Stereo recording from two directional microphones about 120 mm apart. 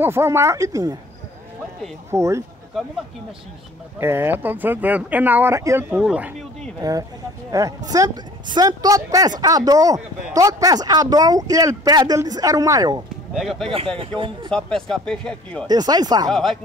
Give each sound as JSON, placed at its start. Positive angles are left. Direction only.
{"t": 0.0, "sound": "speech", "side_deg": -20}
{"t": 2.0, "sound": "speech", "side_deg": -25}
{"t": 4.0, "sound": "speech", "side_deg": -20}
{"t": 5.9, "sound": "speech", "side_deg": -10}
{"t": 6.8, "sound": "a woman's voice", "side_deg": -30}
{"t": 13.3, "sound": "speech", "side_deg": 0}
{"t": 13.9, "sound": "speech", "side_deg": -45}
{"t": 14.5, "sound": "speech", "side_deg": 5}
{"t": 15.6, "sound": "a woman's voice", "side_deg": -35}
{"t": 16.3, "sound": "speech", "side_deg": 0}